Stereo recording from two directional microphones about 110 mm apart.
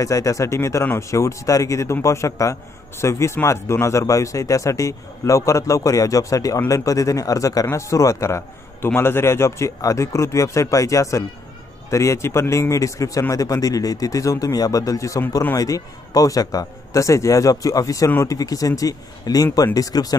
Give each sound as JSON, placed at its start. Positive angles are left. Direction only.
{"t": 0.0, "sound": "speech", "side_deg": 30}